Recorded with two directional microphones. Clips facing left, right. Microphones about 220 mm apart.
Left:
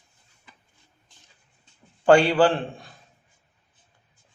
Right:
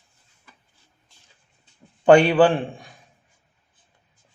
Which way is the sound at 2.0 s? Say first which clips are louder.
Right 3 dB; 20° right (ahead or behind).